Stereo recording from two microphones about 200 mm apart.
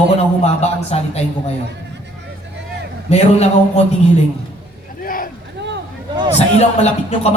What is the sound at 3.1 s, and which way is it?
Speech, 30° left (ahead or behind).